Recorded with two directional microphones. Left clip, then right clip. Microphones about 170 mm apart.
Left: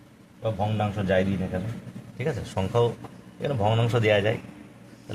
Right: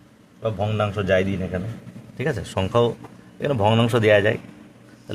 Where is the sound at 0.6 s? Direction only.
85° right.